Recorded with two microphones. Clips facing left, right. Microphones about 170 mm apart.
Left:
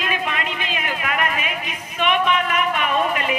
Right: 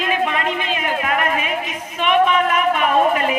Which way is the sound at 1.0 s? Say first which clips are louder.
Right 2 dB; 40° right (ahead or behind).